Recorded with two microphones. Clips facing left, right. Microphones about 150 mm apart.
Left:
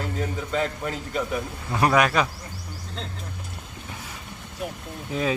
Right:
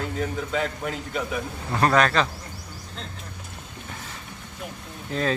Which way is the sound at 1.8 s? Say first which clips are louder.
Even; 10° left (ahead or behind).